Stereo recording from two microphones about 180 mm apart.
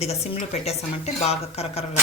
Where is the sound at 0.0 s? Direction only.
35° left (ahead or behind).